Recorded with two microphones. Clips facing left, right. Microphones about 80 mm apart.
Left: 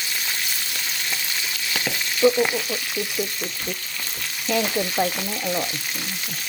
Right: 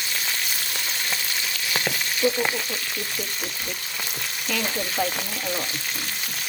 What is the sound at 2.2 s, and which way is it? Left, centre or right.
Frying, left.